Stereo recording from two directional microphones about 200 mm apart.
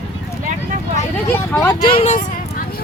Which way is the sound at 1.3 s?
10° left (ahead or behind).